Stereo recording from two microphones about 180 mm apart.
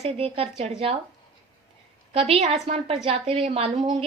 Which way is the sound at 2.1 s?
35° right (ahead or behind).